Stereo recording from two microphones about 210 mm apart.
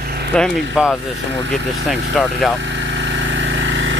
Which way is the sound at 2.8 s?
60° right (ahead or behind).